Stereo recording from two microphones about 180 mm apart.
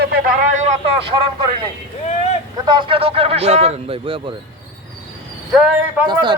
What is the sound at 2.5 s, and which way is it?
Speech, 25° right (ahead or behind).